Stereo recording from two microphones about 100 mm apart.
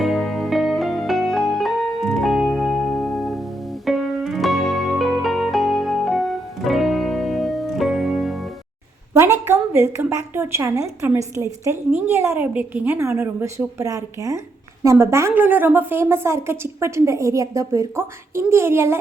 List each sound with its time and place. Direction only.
0.0 s music: centre (ahead or behind)
9.1 s a sound: 25° right (ahead or behind)
9.5 s a woman's voice: 25° right (ahead or behind)